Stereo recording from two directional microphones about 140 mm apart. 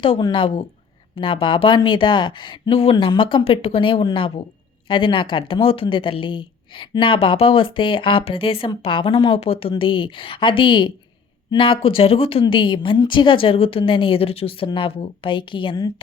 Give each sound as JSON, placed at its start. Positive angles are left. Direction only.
{"t": 0.0, "sound": "speech", "side_deg": 35}